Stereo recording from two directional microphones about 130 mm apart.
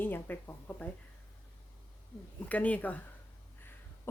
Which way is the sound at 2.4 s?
10° left (ahead or behind).